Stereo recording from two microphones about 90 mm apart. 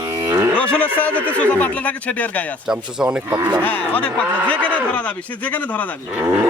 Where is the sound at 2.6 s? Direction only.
5° right (ahead or behind).